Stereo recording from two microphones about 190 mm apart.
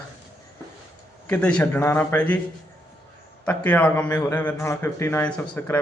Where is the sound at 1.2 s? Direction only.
5° left (ahead or behind).